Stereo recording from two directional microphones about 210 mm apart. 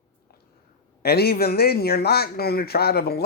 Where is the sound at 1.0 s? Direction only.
50° left (ahead or behind).